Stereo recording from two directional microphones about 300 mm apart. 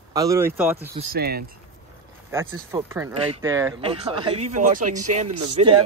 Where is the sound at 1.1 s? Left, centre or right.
Right.